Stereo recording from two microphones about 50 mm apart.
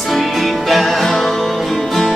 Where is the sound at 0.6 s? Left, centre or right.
Centre.